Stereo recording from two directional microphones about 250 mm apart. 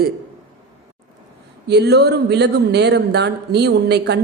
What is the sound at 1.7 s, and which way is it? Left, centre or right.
Speech, right.